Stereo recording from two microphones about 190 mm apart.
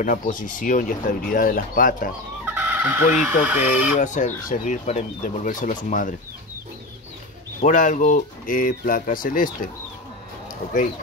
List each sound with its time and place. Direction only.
0.0 s speech: 45° left (ahead or behind)
2.4 s fowl: 10° right (ahead or behind)
4.0 s speech: 40° left (ahead or behind)
7.6 s speech: 40° left (ahead or behind)